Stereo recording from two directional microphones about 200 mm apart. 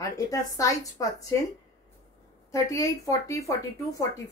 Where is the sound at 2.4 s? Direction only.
15° left (ahead or behind).